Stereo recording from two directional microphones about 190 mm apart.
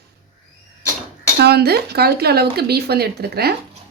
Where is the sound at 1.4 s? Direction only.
55° right (ahead or behind).